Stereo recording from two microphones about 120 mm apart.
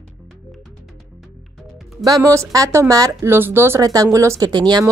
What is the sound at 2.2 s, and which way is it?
Speech, 25° right (ahead or behind).